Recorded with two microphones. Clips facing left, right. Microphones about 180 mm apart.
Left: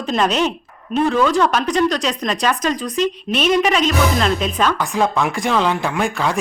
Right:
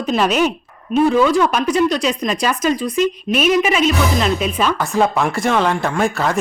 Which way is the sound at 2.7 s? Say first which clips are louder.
Right 3 dB; 40° left (ahead or behind).